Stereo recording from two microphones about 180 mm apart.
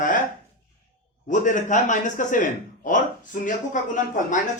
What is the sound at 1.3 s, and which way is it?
Speech, 45° left (ahead or behind).